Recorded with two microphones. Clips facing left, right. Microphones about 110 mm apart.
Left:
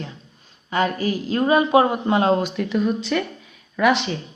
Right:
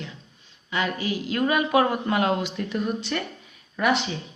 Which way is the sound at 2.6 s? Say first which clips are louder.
Left 6 dB; 90° left.